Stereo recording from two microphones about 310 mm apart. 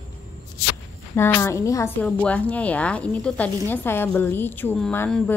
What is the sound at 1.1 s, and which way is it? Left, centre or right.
A woman's voice, centre.